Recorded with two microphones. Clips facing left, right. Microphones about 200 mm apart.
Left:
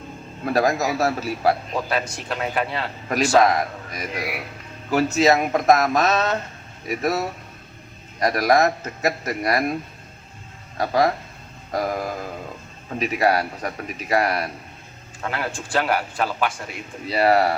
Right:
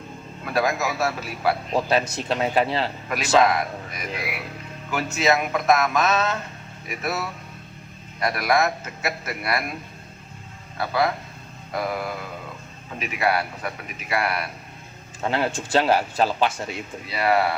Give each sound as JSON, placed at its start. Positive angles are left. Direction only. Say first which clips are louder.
{"t": 0.4, "sound": "a man's voice", "louder": "left 3 dB", "side_deg": 40}
{"t": 1.9, "sound": "a man's voice", "louder": "right 3 dB", "side_deg": -25}
{"t": 3.1, "sound": "a man's voice", "louder": "left 2 dB", "side_deg": 40}
{"t": 10.8, "sound": "a man's voice", "louder": "left 3 dB", "side_deg": 40}
{"t": 15.2, "sound": "a man's voice", "louder": "right 4 dB", "side_deg": -25}
{"t": 17.1, "sound": "a man's voice", "louder": "left 4 dB", "side_deg": 40}